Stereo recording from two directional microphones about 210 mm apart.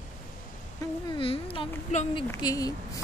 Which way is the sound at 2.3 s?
15° left (ahead or behind).